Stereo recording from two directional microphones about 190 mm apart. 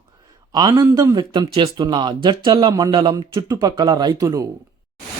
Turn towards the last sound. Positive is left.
turn(degrees=-20)  # may be behind; listen again after turning